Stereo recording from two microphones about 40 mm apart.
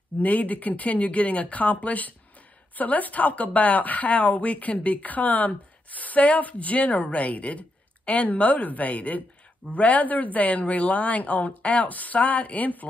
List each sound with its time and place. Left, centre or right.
0.2 s speech: left